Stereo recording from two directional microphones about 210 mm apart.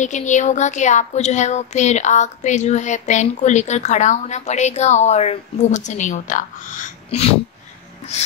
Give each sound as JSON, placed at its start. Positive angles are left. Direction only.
{"t": 0.0, "sound": "speech", "side_deg": 35}